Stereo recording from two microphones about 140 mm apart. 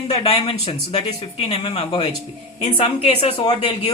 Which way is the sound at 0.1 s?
40° left (ahead or behind).